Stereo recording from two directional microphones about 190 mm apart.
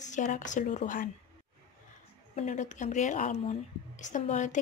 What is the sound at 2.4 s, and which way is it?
Speech, 40° left (ahead or behind).